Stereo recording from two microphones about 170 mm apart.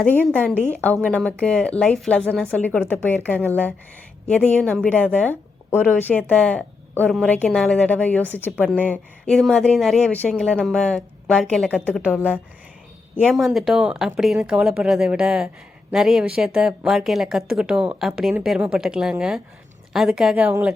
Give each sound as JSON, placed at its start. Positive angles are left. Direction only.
{"t": 0.0, "sound": "a woman's voice", "side_deg": 10}
{"t": 13.2, "sound": "speech", "side_deg": 0}